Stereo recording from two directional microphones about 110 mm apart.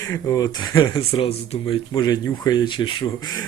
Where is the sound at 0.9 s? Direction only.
50° left (ahead or behind).